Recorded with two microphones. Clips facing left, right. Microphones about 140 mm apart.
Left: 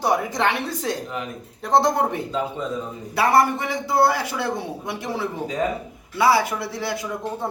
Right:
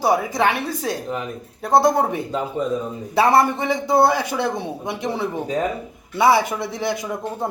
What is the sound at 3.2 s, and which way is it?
A man's voice, 25° right (ahead or behind).